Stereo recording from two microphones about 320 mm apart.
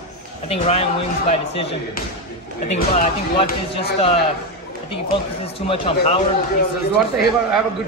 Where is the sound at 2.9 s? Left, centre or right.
Left.